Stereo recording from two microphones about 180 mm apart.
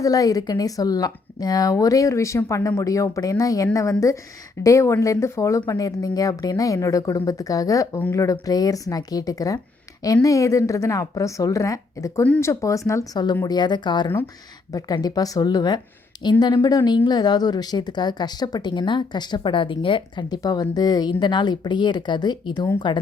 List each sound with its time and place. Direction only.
0.0 s a woman's voice: 20° left (ahead or behind)